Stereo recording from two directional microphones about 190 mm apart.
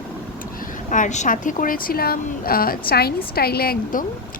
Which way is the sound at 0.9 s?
40° left (ahead or behind).